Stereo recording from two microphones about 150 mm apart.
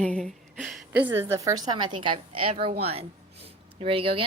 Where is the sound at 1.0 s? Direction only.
15° right (ahead or behind); by 2.5 s 35° right (ahead or behind).